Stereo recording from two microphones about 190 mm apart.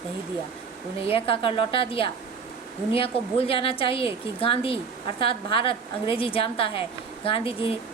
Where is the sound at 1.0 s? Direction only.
30° left (ahead or behind).